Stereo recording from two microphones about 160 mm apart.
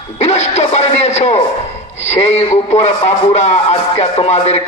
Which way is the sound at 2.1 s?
45° left (ahead or behind).